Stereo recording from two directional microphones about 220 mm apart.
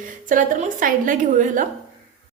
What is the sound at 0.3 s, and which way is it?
A woman's voice, 35° right (ahead or behind).